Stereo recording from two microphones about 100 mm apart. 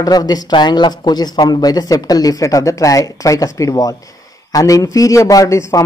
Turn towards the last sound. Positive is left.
turn(degrees=35)  # may be behind; listen again after turning